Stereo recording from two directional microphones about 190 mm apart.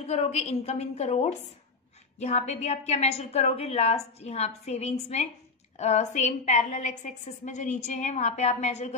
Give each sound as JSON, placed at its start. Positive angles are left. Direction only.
{"t": 0.0, "sound": "a woman's voice", "side_deg": 35}